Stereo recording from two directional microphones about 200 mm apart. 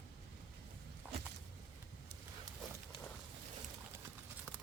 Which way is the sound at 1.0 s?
10° right (ahead or behind).